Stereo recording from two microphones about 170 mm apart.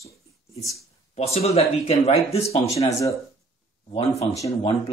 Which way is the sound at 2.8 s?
20° left (ahead or behind).